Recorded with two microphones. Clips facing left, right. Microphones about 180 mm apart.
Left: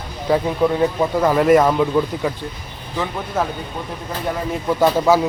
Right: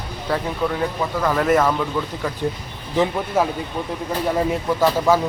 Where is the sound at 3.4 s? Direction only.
10° right (ahead or behind).